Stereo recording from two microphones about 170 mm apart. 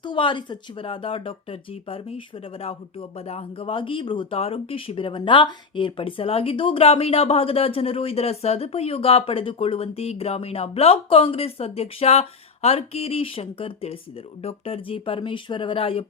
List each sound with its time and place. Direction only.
0.0 s speech: 30° left (ahead or behind)